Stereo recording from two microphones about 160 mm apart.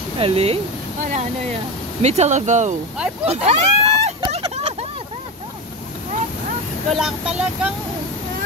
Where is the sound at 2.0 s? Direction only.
45° right (ahead or behind).